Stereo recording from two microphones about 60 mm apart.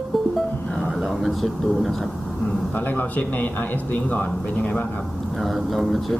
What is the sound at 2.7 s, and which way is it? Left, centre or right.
A man's voice, left.